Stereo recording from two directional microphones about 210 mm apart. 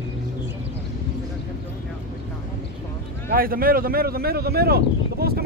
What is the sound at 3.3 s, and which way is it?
Speech, 45° right (ahead or behind).